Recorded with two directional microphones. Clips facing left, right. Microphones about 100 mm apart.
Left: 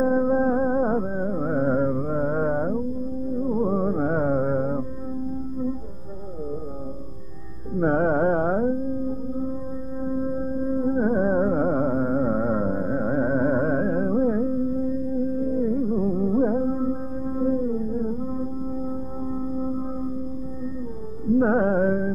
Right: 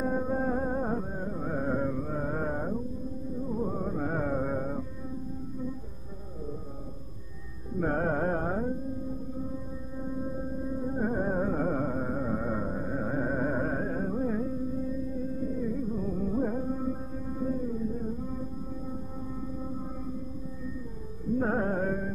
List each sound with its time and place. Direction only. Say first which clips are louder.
0.0 s music: left 9 dB; 35° left (ahead or behind)
7.8 s music: left 8 dB; 35° left (ahead or behind)
10.6 s music: left 9 dB; 35° left (ahead or behind)
15.6 s music: left 9 dB; 40° left (ahead or behind)
21.4 s music: left 9 dB; 35° left (ahead or behind)